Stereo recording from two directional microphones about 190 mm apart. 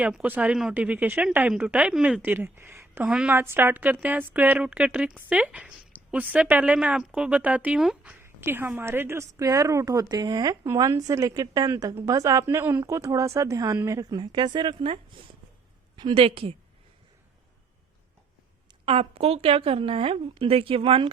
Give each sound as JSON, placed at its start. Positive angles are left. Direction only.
{"t": 0.0, "sound": "a woman's voice", "side_deg": -5}
{"t": 16.0, "sound": "a woman's voice", "side_deg": -25}
{"t": 18.9, "sound": "a woman's voice", "side_deg": -30}